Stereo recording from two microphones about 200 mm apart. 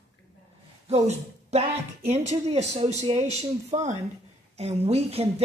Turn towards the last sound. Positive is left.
turn(degrees=-30)  # may be behind; listen again after turning